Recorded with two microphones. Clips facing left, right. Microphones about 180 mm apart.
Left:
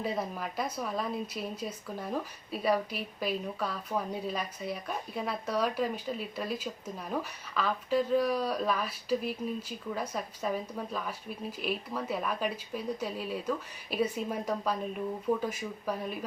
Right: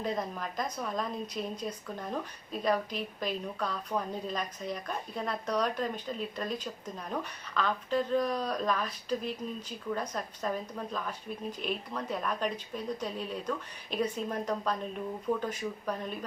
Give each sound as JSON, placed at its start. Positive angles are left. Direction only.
{"t": 0.0, "sound": "a woman's voice", "side_deg": 5}